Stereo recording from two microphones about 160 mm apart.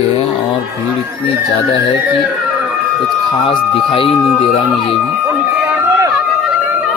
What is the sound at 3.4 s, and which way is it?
Speech, 35° left (ahead or behind).